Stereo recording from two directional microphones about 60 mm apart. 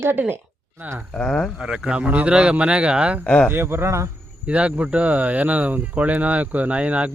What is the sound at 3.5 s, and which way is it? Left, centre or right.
Speech, right.